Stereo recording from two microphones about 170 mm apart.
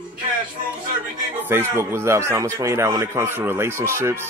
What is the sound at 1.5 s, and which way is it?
Speech, 15° right (ahead or behind).